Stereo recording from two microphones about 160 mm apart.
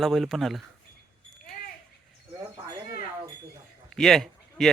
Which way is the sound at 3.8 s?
Centre (ahead or behind).